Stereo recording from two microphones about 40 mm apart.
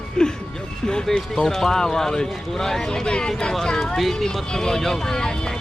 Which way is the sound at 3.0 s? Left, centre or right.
Left.